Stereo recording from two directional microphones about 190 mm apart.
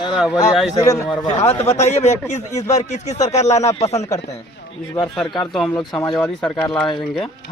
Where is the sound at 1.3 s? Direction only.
15° left (ahead or behind).